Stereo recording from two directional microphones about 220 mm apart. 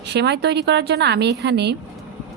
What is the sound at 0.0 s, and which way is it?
A woman's voice, 50° right (ahead or behind).